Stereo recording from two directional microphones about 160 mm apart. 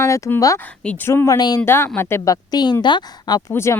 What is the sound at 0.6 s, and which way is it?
Speech, 5° left (ahead or behind).